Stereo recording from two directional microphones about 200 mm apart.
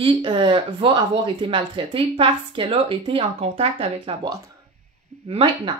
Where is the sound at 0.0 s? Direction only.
25° right (ahead or behind).